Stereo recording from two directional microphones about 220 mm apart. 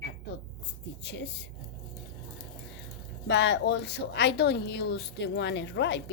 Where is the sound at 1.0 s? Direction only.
50° left (ahead or behind).